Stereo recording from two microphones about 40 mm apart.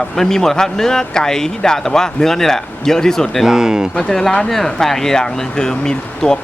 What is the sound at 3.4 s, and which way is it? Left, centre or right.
Speech, centre.